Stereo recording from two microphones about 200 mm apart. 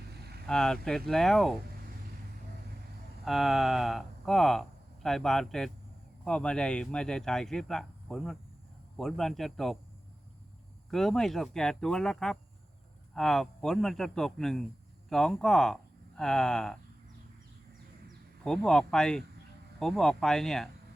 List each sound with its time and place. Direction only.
0.4 s speech: 5° left (ahead or behind)
3.2 s speech: centre (ahead or behind)
10.9 s speech: centre (ahead or behind)
18.4 s speech: 5° left (ahead or behind)